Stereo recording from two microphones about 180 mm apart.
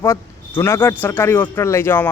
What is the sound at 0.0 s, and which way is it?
A man's voice, 15° left (ahead or behind).